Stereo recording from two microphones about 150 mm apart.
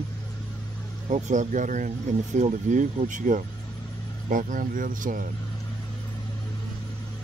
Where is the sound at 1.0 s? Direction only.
55° right (ahead or behind).